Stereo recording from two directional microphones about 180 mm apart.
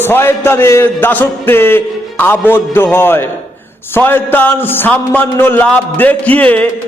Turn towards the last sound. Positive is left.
turn(degrees=10)  # may be behind; listen again after turning